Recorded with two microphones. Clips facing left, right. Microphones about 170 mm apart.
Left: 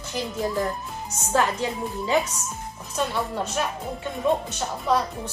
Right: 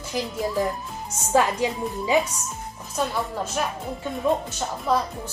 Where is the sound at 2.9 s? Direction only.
Centre (ahead or behind).